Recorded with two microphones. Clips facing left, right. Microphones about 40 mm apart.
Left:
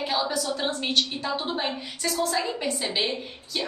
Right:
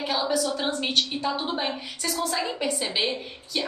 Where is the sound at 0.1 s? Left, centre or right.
Centre.